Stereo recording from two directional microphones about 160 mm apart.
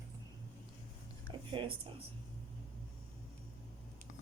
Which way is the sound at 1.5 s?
30° right (ahead or behind).